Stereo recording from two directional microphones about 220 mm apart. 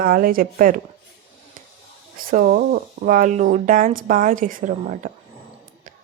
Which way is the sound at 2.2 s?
40° right (ahead or behind).